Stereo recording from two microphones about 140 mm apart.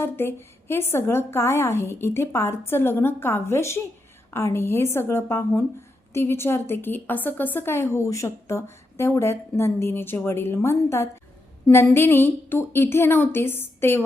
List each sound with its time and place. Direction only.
0.0 s a woman's voice: 15° left (ahead or behind)